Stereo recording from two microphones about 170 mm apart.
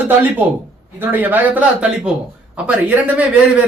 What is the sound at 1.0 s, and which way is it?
A man's voice, 10° right (ahead or behind).